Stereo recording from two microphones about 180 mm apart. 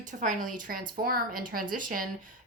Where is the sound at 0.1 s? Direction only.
45° right (ahead or behind).